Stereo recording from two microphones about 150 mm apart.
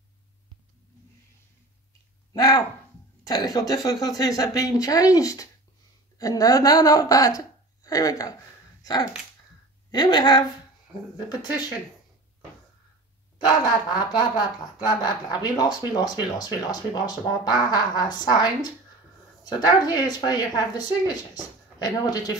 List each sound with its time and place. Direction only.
2.3 s a woman's voice: 25° left (ahead or behind)
9.8 s speech: 30° left (ahead or behind)
13.7 s speech: 30° left (ahead or behind)